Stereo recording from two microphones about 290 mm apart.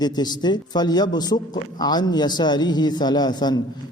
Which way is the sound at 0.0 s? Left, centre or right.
Centre.